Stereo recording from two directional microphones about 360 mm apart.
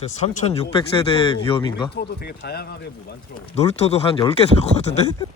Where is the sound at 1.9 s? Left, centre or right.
Left.